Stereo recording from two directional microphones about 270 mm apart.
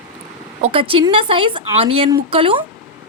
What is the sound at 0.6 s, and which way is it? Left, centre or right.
A woman's voice, centre.